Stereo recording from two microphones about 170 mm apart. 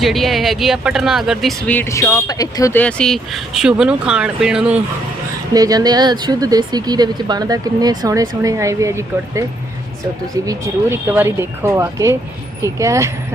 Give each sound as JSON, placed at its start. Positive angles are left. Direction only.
{"t": 0.0, "sound": "speech", "side_deg": 0}
{"t": 2.7, "sound": "speech", "side_deg": 5}
{"t": 5.5, "sound": "speech", "side_deg": -20}
{"t": 10.4, "sound": "speech", "side_deg": -15}